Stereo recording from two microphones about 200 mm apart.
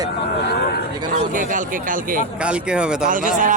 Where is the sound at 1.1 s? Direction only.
40° right (ahead or behind).